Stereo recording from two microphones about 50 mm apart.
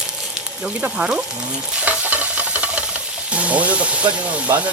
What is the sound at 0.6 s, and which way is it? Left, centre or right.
Speech, centre.